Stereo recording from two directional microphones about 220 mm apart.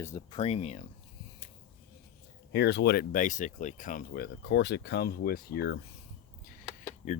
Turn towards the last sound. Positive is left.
turn(degrees=30)  # may be behind; listen again after turning